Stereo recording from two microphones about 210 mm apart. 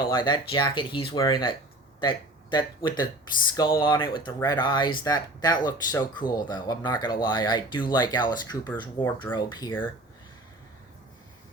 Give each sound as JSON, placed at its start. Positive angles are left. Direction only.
{"t": 0.0, "sound": "speech", "side_deg": 20}